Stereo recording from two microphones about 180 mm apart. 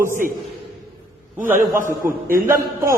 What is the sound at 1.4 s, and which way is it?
Speech, 45° right (ahead or behind).